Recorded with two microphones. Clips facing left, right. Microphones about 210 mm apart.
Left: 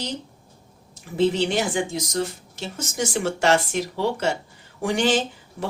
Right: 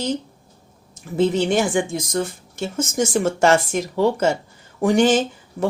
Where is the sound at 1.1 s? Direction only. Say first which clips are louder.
Right 3 dB; 45° right (ahead or behind).